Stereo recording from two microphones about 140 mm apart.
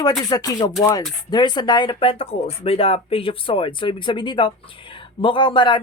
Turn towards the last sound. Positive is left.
turn(degrees=35)  # may be behind; listen again after turning